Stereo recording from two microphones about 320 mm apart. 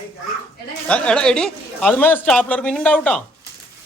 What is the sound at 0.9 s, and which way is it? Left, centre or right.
A man's voice, centre.